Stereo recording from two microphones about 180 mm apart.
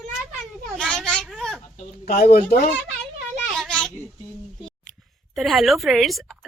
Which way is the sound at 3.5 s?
5° left (ahead or behind).